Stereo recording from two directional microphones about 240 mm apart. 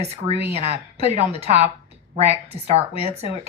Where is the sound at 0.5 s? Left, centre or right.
Right.